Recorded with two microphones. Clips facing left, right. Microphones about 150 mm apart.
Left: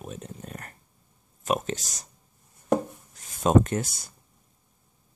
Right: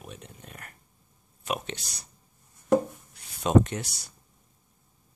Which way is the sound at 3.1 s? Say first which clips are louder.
Left 1 dB; 45° left (ahead or behind).